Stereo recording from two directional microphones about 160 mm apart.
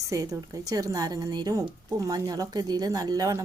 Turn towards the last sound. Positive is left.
turn(degrees=-20)  # may be behind; listen again after turning